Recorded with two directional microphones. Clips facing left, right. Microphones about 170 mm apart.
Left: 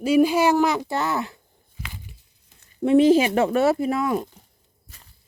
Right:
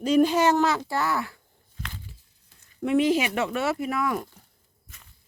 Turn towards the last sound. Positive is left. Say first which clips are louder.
# left 4 dB
turn(degrees=20)  # may be behind; listen again after turning